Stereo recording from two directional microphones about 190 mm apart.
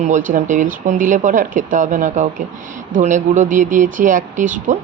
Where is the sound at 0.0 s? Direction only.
40° right (ahead or behind).